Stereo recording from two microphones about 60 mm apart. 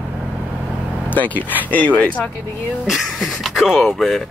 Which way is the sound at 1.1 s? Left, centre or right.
Left.